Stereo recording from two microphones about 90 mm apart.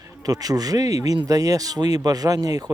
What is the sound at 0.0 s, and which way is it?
Speech, 45° right (ahead or behind).